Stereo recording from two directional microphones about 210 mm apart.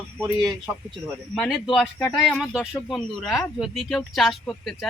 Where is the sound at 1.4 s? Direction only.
Centre (ahead or behind).